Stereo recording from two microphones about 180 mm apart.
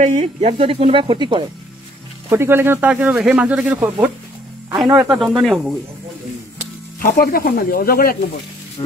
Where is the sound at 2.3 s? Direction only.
15° right (ahead or behind).